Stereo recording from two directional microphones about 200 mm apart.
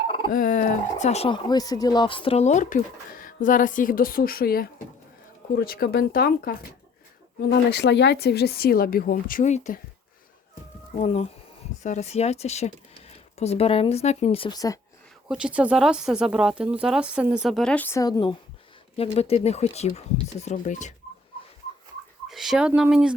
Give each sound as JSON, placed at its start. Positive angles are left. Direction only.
{"t": 0.3, "sound": "speech", "side_deg": 45}
{"t": 10.9, "sound": "speech", "side_deg": 30}
{"t": 15.3, "sound": "speech", "side_deg": -5}
{"t": 18.9, "sound": "speech", "side_deg": 30}
{"t": 22.3, "sound": "speech", "side_deg": 0}